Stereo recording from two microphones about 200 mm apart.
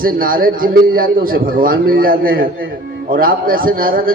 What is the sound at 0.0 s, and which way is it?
A man's voice, 45° right (ahead or behind).